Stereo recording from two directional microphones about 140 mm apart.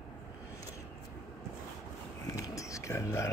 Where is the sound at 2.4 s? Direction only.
25° left (ahead or behind).